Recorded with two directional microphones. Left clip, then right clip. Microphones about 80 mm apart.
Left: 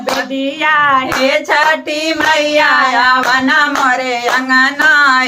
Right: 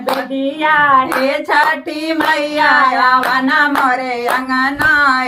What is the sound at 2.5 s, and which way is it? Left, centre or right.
Child singing, left.